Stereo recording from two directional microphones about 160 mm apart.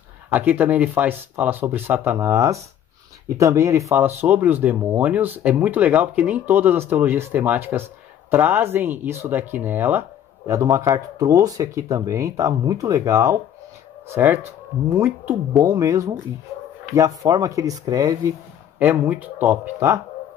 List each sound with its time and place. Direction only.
0.3 s speech: 10° right (ahead or behind)
15.6 s speech: 20° right (ahead or behind)
18.8 s speech: 10° right (ahead or behind)